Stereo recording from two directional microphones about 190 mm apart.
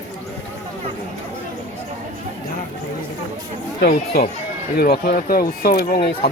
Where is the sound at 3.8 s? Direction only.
55° left (ahead or behind).